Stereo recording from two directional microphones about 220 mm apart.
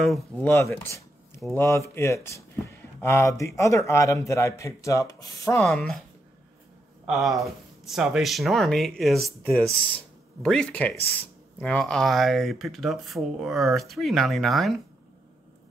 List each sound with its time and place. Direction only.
0.0 s speech: 5° left (ahead or behind)
5.6 s speech: centre (ahead or behind)
7.1 s speech: centre (ahead or behind)